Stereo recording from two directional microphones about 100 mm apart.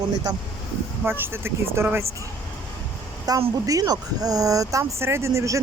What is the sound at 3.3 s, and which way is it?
Speech, 40° right (ahead or behind).